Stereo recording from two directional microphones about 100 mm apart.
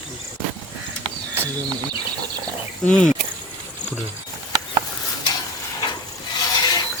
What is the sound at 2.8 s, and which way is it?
Speech, 10° left (ahead or behind).